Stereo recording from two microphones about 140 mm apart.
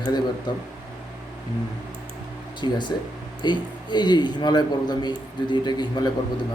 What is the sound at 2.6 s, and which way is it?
A man's voice, 35° left (ahead or behind).